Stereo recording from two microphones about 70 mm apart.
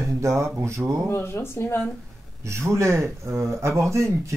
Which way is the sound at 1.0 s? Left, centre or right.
Left.